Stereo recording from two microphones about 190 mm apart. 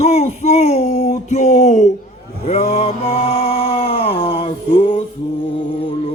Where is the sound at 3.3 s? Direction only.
30° left (ahead or behind).